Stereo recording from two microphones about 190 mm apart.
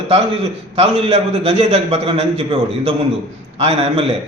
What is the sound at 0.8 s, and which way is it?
A man's voice, 30° right (ahead or behind).